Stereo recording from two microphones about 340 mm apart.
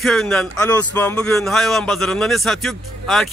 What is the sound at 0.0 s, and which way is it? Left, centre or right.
Speech, centre.